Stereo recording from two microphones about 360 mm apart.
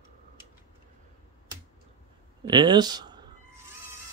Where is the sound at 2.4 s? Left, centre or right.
Centre.